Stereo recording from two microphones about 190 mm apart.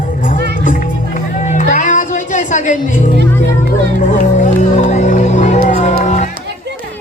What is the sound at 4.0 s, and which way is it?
Music, 40° left (ahead or behind).